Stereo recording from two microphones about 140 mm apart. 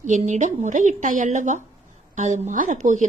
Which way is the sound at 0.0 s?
60° right (ahead or behind).